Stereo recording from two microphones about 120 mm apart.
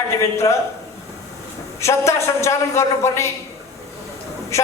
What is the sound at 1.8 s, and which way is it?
A woman's voice, 25° left (ahead or behind).